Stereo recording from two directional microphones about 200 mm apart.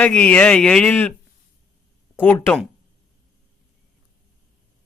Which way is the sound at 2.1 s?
10° left (ahead or behind).